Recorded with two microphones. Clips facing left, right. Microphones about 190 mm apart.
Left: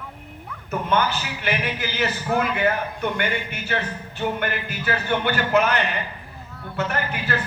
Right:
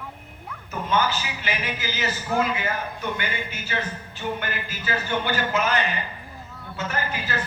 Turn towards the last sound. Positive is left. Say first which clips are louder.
# left 3 dB
turn(degrees=60)  # may be behind; listen again after turning